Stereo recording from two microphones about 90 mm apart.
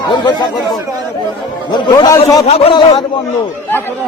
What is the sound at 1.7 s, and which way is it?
Speech, 55° left (ahead or behind).